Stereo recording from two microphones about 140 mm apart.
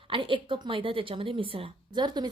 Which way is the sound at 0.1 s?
35° right (ahead or behind).